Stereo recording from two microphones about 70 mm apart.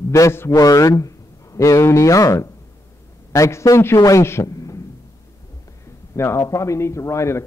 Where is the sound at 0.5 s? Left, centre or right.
Left.